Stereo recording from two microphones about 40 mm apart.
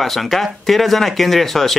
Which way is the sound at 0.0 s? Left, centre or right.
Centre.